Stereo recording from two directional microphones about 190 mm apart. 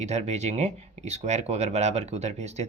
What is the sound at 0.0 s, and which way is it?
Speech, 35° right (ahead or behind).